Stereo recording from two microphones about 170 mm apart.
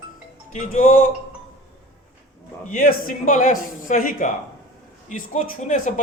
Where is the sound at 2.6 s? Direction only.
50° left (ahead or behind).